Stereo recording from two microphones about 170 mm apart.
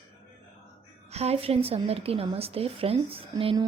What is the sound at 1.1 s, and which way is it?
Speech, 35° right (ahead or behind).